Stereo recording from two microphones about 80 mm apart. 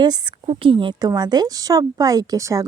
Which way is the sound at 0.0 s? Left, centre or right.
Right.